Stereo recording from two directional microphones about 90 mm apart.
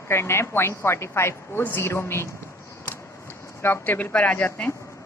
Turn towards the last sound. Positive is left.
turn(degrees=15)  # may be behind; listen again after turning